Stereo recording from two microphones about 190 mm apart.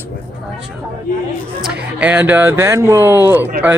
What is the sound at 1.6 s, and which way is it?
Speech, 5° right (ahead or behind).